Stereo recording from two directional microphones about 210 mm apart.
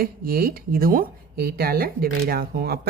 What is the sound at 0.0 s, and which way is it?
A woman's voice, 45° right (ahead or behind).